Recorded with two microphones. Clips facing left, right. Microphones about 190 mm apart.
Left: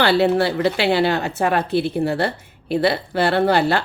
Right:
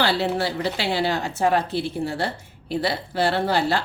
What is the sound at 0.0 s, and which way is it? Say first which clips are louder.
A woman's voice: left 6 dB; 60° left (ahead or behind).